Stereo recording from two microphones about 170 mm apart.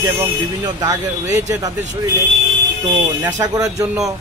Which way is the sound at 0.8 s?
20° right (ahead or behind).